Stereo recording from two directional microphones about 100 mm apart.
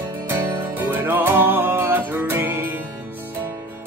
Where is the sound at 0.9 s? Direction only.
20° right (ahead or behind).